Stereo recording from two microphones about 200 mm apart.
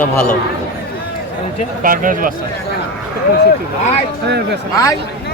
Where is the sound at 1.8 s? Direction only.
45° right (ahead or behind).